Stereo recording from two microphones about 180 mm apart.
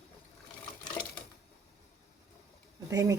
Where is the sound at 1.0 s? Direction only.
5° left (ahead or behind).